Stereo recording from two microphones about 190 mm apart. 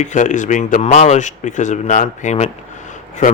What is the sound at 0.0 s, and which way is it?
Speech, 40° left (ahead or behind).